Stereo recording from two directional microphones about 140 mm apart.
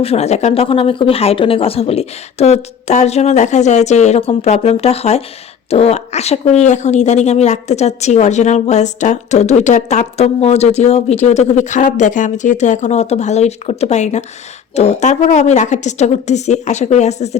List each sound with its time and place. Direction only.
0.0 s a woman's voice: 45° left (ahead or behind)